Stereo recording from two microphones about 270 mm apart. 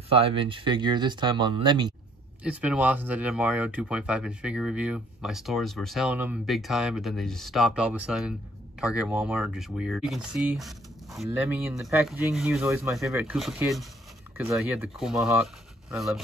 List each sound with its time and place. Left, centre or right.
0.1 s speech: centre
2.4 s speech: centre